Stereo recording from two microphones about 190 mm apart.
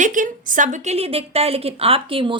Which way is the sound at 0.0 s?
45° right (ahead or behind).